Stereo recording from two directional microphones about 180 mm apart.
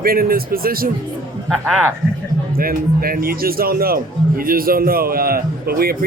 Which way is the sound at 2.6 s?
55° right (ahead or behind).